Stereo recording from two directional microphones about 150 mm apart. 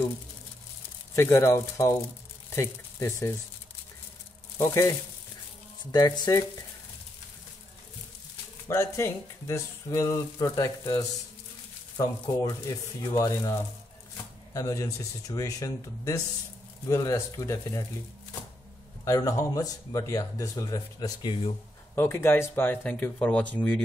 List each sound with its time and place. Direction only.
1.1 s speech: 20° left (ahead or behind)
4.6 s speech: 20° left (ahead or behind)
8.6 s speech: 20° left (ahead or behind)
19.0 s speech: 20° left (ahead or behind)
21.9 s speech: 15° left (ahead or behind)